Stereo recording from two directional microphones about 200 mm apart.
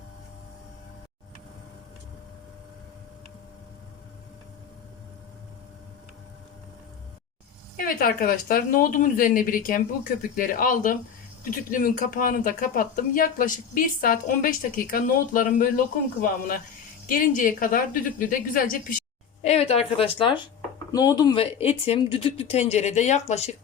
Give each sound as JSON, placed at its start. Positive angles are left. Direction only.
{"t": 7.8, "sound": "speech", "side_deg": 45}
{"t": 17.1, "sound": "speech", "side_deg": 45}
{"t": 19.4, "sound": "a woman's voice", "side_deg": 30}